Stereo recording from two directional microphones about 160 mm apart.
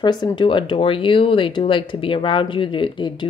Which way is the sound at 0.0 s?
30° left (ahead or behind).